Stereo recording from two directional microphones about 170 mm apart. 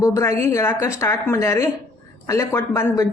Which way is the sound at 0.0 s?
15° left (ahead or behind).